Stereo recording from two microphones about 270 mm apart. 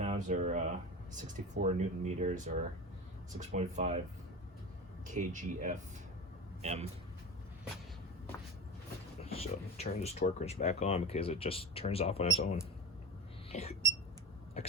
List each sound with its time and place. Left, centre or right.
0.0 s speech: right
5.0 s speech: right
9.2 s speech: left
13.5 s a sound: left